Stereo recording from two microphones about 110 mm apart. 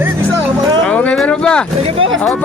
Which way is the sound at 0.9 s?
10° left (ahead or behind).